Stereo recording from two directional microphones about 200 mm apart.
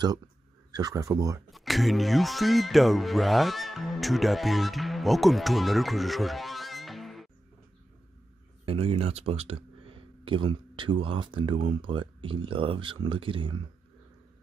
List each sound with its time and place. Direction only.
0.7 s speech: 20° right (ahead or behind)
1.5 s speech: centre (ahead or behind)
8.6 s speech: 30° right (ahead or behind)